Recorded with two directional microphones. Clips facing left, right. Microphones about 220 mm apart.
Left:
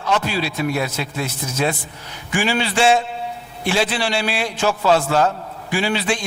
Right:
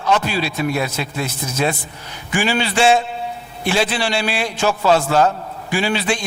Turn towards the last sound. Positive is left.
turn(degrees=-15)  # may be behind; listen again after turning